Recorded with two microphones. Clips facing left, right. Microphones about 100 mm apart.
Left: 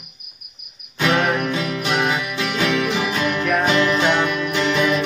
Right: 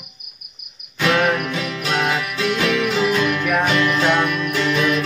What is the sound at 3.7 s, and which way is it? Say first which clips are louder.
Music: left 1 dB; 30° left (ahead or behind).